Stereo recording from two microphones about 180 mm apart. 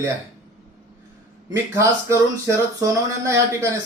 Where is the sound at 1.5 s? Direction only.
15° right (ahead or behind).